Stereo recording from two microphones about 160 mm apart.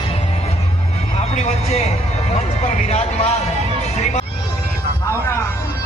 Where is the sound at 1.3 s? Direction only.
40° left (ahead or behind).